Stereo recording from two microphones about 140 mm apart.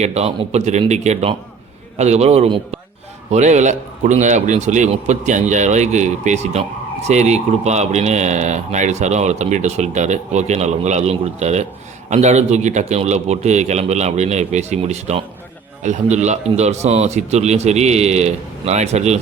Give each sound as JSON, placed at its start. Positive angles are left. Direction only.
{"t": 0.0, "sound": "a man's voice", "side_deg": -50}